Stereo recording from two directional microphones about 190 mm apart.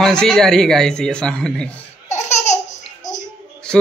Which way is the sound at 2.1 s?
35° left (ahead or behind).